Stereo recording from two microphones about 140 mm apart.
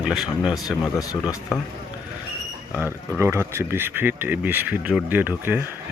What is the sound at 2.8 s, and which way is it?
Speech, 15° right (ahead or behind).